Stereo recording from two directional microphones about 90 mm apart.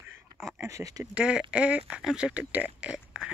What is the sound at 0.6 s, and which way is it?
Speech, 40° right (ahead or behind).